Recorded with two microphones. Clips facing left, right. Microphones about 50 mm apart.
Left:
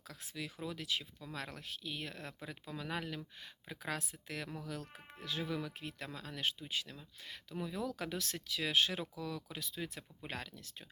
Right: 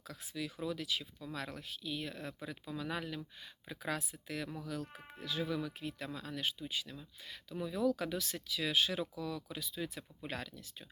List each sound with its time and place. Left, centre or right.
0.1 s speech: left